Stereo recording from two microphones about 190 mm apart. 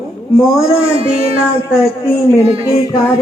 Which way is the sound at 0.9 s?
30° right (ahead or behind).